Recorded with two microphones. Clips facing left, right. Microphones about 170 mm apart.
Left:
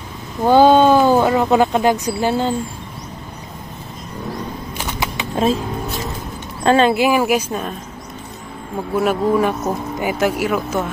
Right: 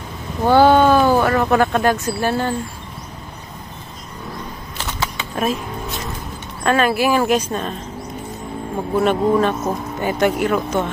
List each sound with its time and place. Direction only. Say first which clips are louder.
0.5 s speech: left 1 dB; 15° left (ahead or behind)
4.7 s a sound: even; 15° left (ahead or behind)
6.6 s a woman's voice: left 3 dB; 25° left (ahead or behind); by 7.7 s 10° left (ahead or behind)
8.9 s speech: even; 5° left (ahead or behind)